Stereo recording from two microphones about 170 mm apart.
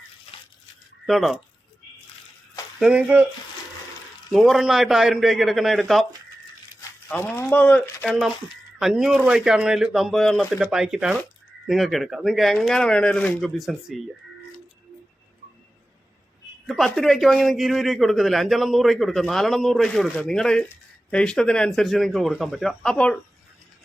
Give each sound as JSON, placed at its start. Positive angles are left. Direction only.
{"t": 0.3, "sound": "crushing", "side_deg": 35}
{"t": 1.0, "sound": "a man's voice", "side_deg": 0}
{"t": 2.8, "sound": "speech", "side_deg": -5}
{"t": 4.3, "sound": "a man's voice", "side_deg": 0}
{"t": 7.1, "sound": "a man's voice", "side_deg": 10}
{"t": 16.6, "sound": "a man's voice", "side_deg": 0}